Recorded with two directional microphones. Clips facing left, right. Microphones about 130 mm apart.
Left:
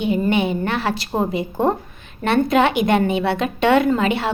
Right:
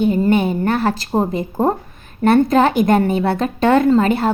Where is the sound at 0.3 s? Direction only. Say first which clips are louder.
Right 4 dB; 40° right (ahead or behind).